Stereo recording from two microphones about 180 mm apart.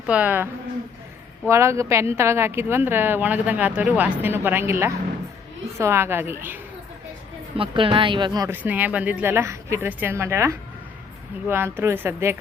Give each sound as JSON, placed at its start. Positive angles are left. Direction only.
{"t": 0.1, "sound": "a woman's voice", "side_deg": -10}
{"t": 1.5, "sound": "a woman's voice", "side_deg": -15}
{"t": 7.5, "sound": "a woman's voice", "side_deg": -30}
{"t": 8.4, "sound": "a woman's voice", "side_deg": -10}